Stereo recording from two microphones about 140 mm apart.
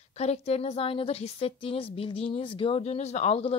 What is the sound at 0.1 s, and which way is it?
A woman's voice, 50° left (ahead or behind).